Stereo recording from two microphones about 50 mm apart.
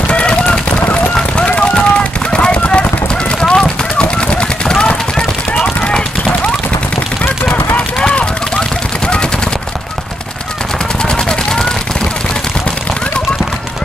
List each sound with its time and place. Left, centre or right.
0.1 s a sound: left
8.0 s machine gun: left
11.1 s machine gun: centre